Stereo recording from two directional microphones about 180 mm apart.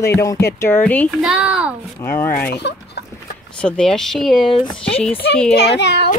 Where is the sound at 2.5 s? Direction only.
70° left (ahead or behind).